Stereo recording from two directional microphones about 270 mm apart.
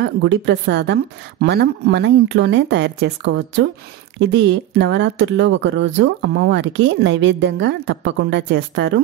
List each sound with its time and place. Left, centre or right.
0.0 s speech: right
4.2 s speech: right